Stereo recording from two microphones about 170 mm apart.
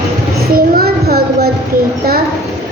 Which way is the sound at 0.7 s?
65° right (ahead or behind).